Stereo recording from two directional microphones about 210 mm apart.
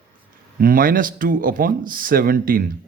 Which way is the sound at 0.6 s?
40° right (ahead or behind).